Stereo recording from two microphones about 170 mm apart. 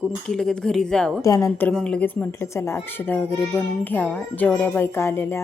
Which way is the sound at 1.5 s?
5° left (ahead or behind).